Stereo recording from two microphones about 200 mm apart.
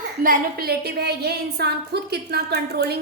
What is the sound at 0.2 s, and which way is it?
A woman's voice, 45° right (ahead or behind).